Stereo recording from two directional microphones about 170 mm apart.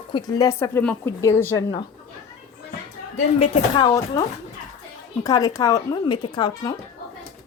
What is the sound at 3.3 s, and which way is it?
Speech, 35° left (ahead or behind).